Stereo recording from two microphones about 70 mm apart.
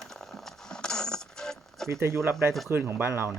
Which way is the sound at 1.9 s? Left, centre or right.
Right.